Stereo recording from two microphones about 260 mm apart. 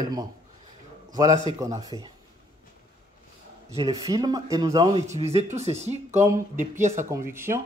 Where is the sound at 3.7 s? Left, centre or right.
Centre.